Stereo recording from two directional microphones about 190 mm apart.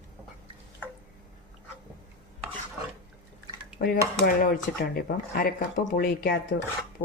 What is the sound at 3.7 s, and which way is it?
Speech, 45° left (ahead or behind).